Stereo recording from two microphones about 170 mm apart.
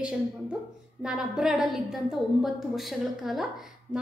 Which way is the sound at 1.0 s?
5° right (ahead or behind).